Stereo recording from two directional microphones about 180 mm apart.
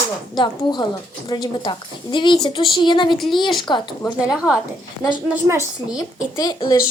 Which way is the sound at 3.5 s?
25° left (ahead or behind).